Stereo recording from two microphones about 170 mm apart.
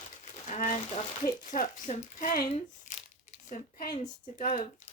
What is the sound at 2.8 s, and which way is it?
Crumpling, 45° left (ahead or behind).